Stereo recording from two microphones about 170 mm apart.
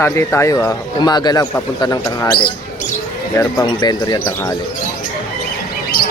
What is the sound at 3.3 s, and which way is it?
Speech, 25° left (ahead or behind).